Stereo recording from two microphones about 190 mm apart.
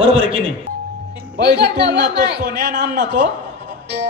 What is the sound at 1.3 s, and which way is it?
A man's voice, 60° right (ahead or behind).